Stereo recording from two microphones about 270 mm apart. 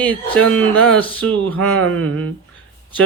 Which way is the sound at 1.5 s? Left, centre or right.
Right.